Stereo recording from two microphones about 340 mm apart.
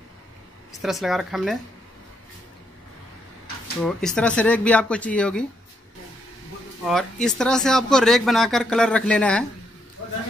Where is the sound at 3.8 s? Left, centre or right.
Centre.